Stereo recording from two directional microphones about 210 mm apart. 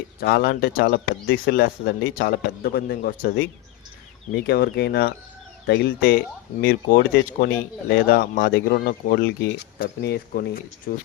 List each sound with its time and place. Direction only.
0.2 s speech: 50° left (ahead or behind)